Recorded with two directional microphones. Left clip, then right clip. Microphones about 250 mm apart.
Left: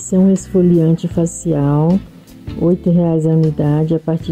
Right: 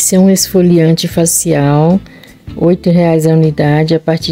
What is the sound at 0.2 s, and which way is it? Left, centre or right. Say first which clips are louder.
Speech: right 3 dB; right.